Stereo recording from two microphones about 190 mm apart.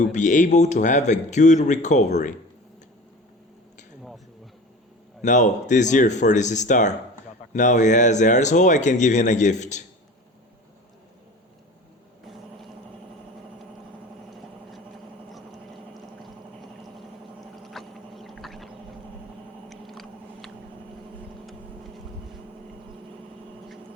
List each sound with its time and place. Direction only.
0.0 s speech: 40° left (ahead or behind)
5.2 s speech: 40° left (ahead or behind)
17.6 s a sound: centre (ahead or behind)
19.7 s chewing: centre (ahead or behind)